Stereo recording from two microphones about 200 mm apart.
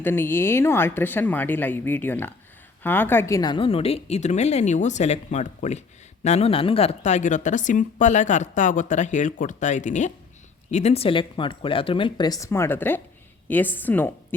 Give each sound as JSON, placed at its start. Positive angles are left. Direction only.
{"t": 0.0, "sound": "a woman's voice", "side_deg": 10}